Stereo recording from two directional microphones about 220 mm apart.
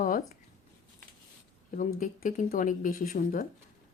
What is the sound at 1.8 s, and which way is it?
Speech, 35° left (ahead or behind).